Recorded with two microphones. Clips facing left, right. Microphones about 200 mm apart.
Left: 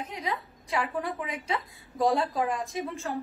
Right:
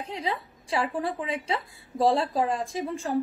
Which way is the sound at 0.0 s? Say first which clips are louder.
Right 2 dB; 30° right (ahead or behind).